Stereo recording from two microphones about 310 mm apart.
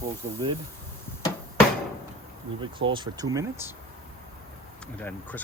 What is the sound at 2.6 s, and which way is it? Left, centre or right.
Speech, centre.